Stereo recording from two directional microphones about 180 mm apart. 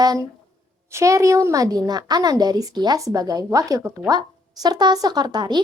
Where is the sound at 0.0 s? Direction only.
20° right (ahead or behind).